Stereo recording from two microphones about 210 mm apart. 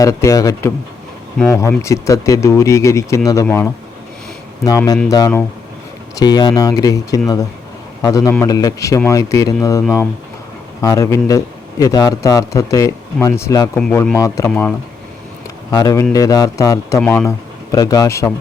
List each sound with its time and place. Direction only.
0.0 s a man's voice: 15° left (ahead or behind)
15.7 s a man's voice: 15° left (ahead or behind)